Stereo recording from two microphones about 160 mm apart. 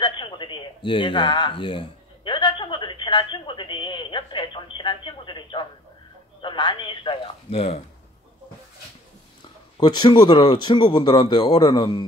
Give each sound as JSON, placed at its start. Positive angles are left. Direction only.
{"t": 0.0, "sound": "a man's voice", "side_deg": 30}
{"t": 9.8, "sound": "speech", "side_deg": 30}